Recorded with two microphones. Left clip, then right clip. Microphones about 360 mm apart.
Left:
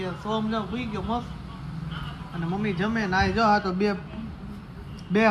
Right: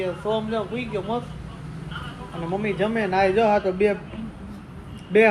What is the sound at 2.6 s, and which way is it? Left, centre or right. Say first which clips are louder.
Speech: right 4 dB; left.